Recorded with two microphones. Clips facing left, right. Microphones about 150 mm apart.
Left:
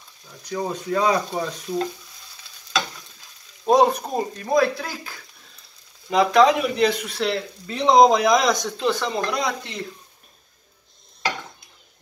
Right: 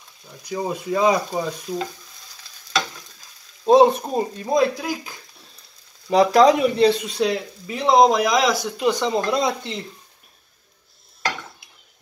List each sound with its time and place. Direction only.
0.5 s speech: 10° right (ahead or behind)
1.3 s stir: centre (ahead or behind)
3.6 s speech: 20° right (ahead or behind)
6.0 s speech: 35° right (ahead or behind)